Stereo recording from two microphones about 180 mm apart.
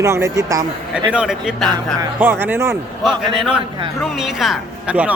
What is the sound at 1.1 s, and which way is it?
Speech, 5° right (ahead or behind).